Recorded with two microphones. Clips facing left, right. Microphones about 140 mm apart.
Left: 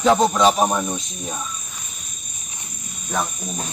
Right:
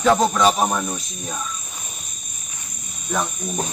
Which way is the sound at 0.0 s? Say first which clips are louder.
Left 1 dB; centre (ahead or behind).